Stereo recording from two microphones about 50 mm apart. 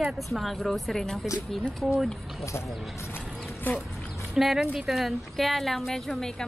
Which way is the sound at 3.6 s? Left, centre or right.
Left.